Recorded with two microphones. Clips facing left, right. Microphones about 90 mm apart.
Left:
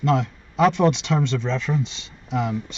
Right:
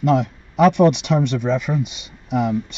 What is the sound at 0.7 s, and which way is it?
Speech, 15° right (ahead or behind).